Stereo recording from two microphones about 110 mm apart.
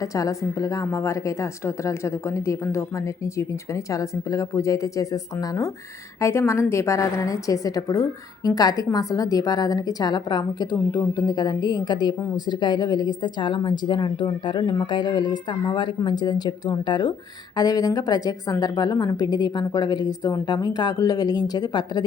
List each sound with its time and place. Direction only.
0.0 s a woman's voice: 30° left (ahead or behind)
3.9 s a woman's voice: 30° left (ahead or behind)